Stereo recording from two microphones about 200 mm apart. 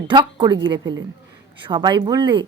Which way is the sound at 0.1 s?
25° right (ahead or behind).